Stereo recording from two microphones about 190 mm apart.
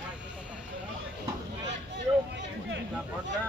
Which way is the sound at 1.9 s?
75° right (ahead or behind).